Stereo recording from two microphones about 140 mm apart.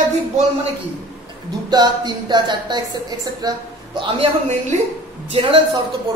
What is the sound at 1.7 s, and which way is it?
A woman's voice, 30° right (ahead or behind).